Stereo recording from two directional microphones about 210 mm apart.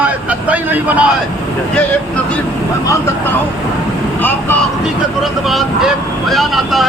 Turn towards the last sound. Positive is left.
turn(degrees=0)  # may be behind; listen again after turning